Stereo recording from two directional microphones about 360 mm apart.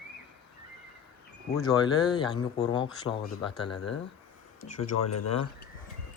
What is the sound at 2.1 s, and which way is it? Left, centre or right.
Speech, centre.